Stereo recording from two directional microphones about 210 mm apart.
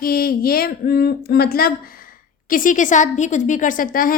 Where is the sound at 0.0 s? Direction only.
45° left (ahead or behind).